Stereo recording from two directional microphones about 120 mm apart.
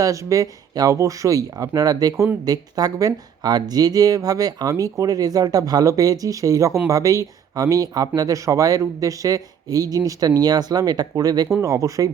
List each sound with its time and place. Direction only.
0.0 s speech: 25° right (ahead or behind)